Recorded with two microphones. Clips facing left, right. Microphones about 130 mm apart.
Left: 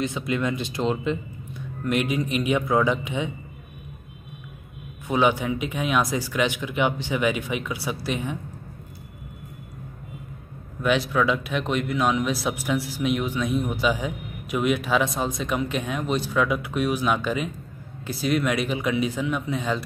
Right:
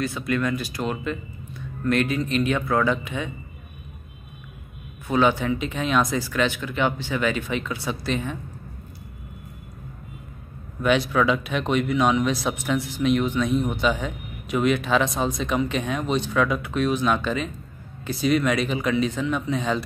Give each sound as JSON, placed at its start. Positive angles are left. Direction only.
{"t": 0.0, "sound": "speech", "side_deg": 20}
{"t": 5.0, "sound": "speech", "side_deg": 15}
{"t": 10.8, "sound": "a man's voice", "side_deg": 0}